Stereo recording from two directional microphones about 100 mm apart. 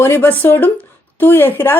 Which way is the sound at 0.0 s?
20° left (ahead or behind).